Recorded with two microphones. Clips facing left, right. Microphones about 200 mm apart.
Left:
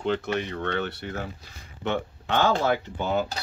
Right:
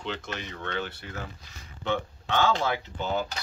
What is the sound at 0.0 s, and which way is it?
Speech, 55° left (ahead or behind).